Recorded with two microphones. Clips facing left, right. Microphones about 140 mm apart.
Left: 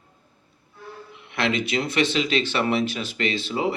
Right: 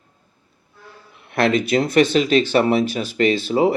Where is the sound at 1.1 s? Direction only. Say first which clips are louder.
Right 7 dB; 45° right (ahead or behind).